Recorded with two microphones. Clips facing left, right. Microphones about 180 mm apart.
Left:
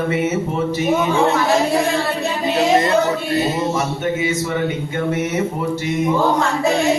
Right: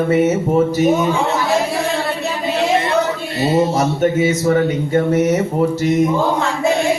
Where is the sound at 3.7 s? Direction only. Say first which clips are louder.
Right 5 dB; 40° right (ahead or behind).